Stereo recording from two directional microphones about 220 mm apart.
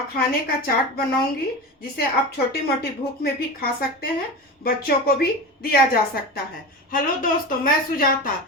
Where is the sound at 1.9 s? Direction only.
45° left (ahead or behind).